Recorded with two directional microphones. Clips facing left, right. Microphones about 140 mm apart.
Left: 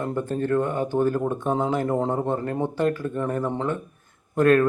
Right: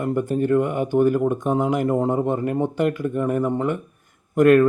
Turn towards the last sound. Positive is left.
turn(degrees=-15)  # may be behind; listen again after turning